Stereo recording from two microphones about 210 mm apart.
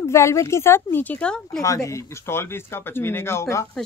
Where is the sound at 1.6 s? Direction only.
15° left (ahead or behind).